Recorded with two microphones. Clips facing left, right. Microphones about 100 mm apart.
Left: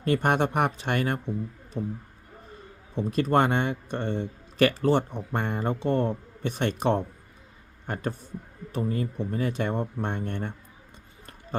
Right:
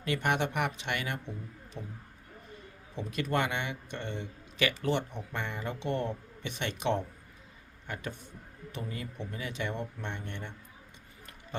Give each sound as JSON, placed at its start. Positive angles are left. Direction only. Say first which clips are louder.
{"t": 0.0, "sound": "speech", "louder": "left 6 dB", "side_deg": 40}
{"t": 2.9, "sound": "speech", "louder": "left 8 dB", "side_deg": 35}